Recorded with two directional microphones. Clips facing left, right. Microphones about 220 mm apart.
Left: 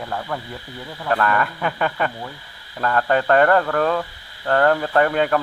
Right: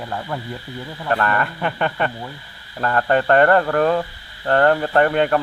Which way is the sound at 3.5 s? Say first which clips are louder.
Right 2 dB; 15° right (ahead or behind).